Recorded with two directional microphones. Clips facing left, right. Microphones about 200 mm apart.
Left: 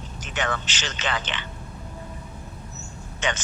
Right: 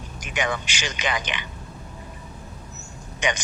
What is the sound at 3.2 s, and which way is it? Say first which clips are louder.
Speech: right 2 dB; 15° right (ahead or behind).